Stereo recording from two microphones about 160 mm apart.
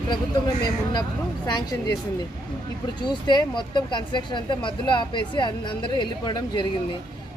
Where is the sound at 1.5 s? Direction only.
25° left (ahead or behind).